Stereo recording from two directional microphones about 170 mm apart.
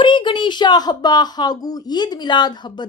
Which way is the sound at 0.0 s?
30° left (ahead or behind).